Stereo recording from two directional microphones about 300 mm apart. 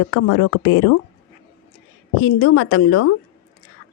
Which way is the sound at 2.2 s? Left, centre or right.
Left.